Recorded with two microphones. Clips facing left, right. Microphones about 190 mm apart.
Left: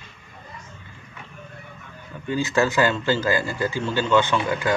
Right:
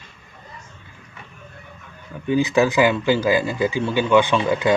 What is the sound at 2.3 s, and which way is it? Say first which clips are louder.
Speech: right 4 dB; 15° right (ahead or behind).